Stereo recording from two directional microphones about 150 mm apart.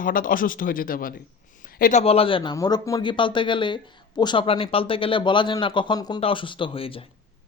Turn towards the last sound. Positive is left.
turn(degrees=35)  # may be behind; listen again after turning